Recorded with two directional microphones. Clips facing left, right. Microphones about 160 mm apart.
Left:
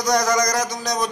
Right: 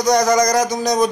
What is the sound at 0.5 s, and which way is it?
Speech, 10° right (ahead or behind).